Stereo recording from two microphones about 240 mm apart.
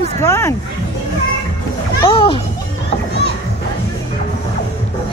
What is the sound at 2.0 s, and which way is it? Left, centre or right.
Speech, left.